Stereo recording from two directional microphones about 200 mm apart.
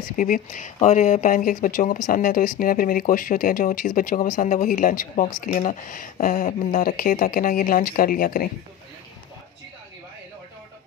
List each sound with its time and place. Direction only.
0.2 s speech: 40° left (ahead or behind)